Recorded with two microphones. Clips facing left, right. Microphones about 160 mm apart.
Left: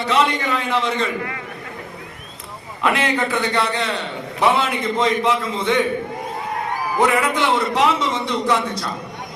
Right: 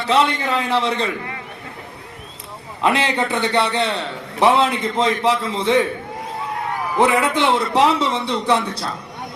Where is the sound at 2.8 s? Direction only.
30° right (ahead or behind).